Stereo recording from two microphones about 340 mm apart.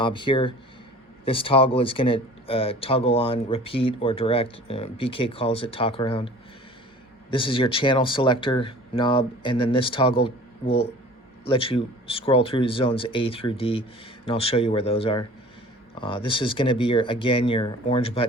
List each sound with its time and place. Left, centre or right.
0.0 s speech: centre